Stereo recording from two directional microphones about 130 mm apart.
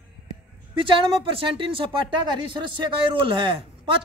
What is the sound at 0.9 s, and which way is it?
A man's voice, 40° right (ahead or behind).